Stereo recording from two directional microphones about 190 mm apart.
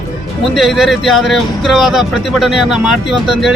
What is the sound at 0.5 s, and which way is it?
Speech, centre (ahead or behind).